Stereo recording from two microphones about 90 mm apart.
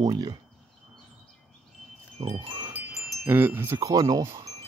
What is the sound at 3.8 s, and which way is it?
Speech, 40° right (ahead or behind).